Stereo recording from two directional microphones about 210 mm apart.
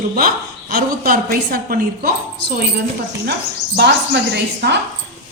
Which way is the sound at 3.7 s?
50° right (ahead or behind).